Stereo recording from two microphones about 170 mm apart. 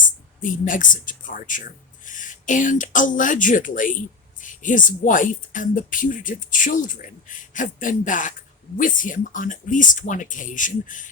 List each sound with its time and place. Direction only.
0.4 s a woman's voice: 50° left (ahead or behind)